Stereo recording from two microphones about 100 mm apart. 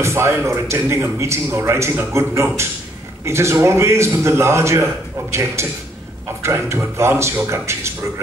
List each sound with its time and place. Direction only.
0.0 s a man's voice: 25° right (ahead or behind)